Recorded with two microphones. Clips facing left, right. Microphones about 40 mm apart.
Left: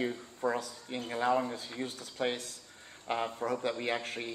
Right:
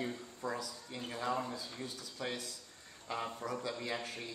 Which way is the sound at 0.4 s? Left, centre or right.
Left.